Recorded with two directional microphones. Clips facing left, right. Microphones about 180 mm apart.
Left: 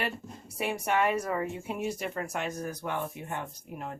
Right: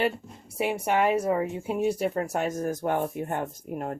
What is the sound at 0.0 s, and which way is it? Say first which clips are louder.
Speech: right 7 dB; 25° right (ahead or behind).